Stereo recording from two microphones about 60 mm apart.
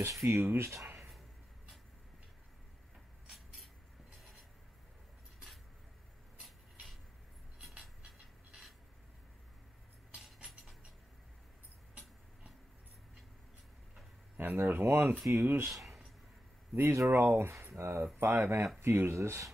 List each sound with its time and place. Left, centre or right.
0.3 s speech: right
0.9 s a sound: centre
3.3 s vehicle: centre
6.4 s a sound: centre
8.0 s a sound: centre
10.2 s a sound: centre
14.3 s speech: right
16.7 s speech: right
17.1 s speech: right
17.7 s speech: right
18.2 s speech: right
18.8 s speech: right